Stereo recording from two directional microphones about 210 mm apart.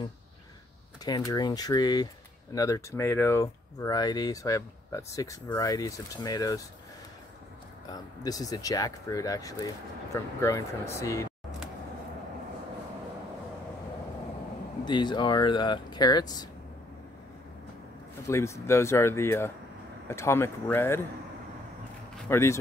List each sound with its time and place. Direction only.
1.0 s speech: 20° left (ahead or behind)
7.9 s speech: 20° left (ahead or behind)
14.9 s speech: 20° left (ahead or behind)
18.2 s speech: 15° left (ahead or behind)
22.2 s speech: 10° left (ahead or behind)